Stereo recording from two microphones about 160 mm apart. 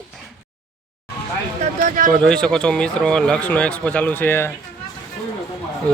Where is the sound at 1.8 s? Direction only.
55° right (ahead or behind).